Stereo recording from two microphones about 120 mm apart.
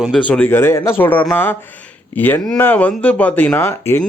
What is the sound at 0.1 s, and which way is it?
Speech, 10° left (ahead or behind).